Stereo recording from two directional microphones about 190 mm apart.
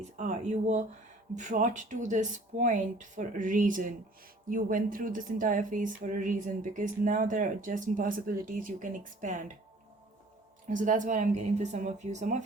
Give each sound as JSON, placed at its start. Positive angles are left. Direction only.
{"t": 0.2, "sound": "speech", "side_deg": -40}
{"t": 10.7, "sound": "speech", "side_deg": -40}